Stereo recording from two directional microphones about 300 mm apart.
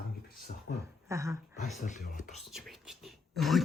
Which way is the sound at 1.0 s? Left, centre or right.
Centre.